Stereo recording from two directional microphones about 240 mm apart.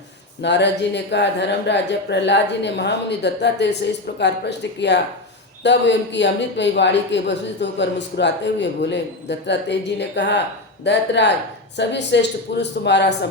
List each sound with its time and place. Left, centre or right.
0.4 s speech: left